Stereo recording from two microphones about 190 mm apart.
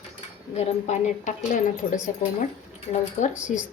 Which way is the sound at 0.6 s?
35° left (ahead or behind).